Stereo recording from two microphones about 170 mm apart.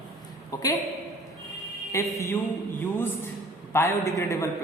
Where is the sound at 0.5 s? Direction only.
20° left (ahead or behind).